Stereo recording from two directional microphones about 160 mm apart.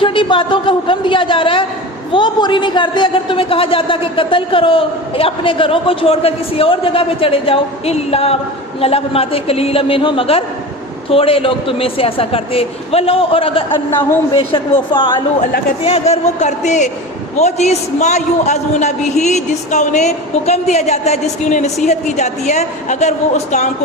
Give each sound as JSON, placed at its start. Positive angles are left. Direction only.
{"t": 0.0, "sound": "a sound", "side_deg": 30}
{"t": 2.1, "sound": "a man's voice", "side_deg": 30}
{"t": 15.8, "sound": "a man's voice", "side_deg": 40}